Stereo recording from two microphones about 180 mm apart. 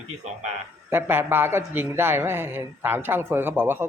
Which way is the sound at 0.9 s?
10° right (ahead or behind).